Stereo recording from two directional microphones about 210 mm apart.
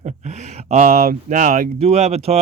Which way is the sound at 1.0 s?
40° right (ahead or behind).